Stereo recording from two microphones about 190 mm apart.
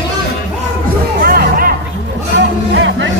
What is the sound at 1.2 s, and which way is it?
Music, 50° right (ahead or behind).